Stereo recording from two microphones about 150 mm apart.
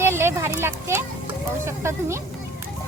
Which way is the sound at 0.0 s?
15° right (ahead or behind).